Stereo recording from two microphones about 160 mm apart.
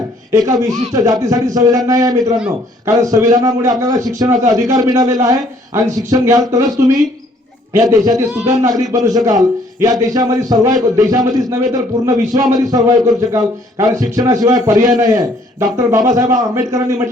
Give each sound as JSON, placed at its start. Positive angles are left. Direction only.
{"t": 0.3, "sound": "a man's voice", "side_deg": -20}